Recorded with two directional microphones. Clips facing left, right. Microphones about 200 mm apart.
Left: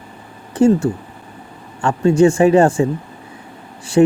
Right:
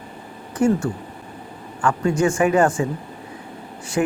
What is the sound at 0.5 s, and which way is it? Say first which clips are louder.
Speech: left 6 dB; 25° left (ahead or behind).